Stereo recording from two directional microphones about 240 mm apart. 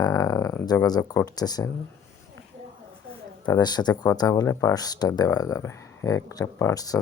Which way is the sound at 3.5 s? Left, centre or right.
Centre.